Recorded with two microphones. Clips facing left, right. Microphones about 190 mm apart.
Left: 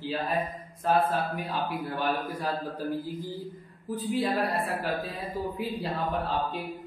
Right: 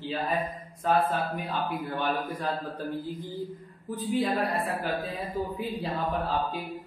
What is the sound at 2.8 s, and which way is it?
Speech, 40° left (ahead or behind).